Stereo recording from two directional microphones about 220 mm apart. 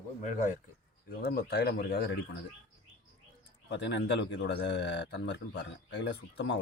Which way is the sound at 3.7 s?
50° left (ahead or behind).